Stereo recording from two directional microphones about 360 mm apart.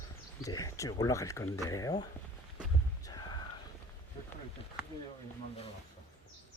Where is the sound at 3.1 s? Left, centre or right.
Centre.